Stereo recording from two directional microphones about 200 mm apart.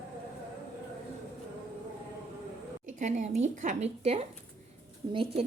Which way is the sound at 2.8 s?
35° right (ahead or behind).